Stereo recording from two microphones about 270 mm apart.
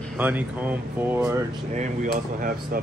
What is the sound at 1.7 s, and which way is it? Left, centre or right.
Speech, right.